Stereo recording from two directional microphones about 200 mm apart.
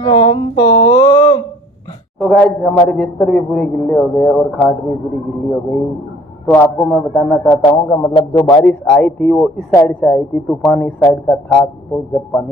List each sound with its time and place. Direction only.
0.0 s a sound: 20° left (ahead or behind)
2.1 s a man's voice: centre (ahead or behind)
6.4 s a man's voice: 5° left (ahead or behind)
8.1 s a man's voice: 20° left (ahead or behind)
8.5 s a man's voice: 5° left (ahead or behind)